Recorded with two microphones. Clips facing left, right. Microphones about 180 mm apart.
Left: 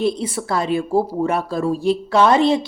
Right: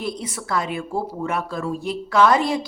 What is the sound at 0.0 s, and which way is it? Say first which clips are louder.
A woman's voice: left 8 dB; 30° left (ahead or behind).